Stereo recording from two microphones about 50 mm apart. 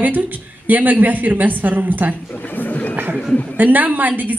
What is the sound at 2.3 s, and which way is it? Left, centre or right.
Speech, left.